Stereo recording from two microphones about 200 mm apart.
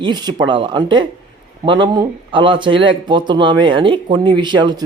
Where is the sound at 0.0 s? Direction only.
20° right (ahead or behind).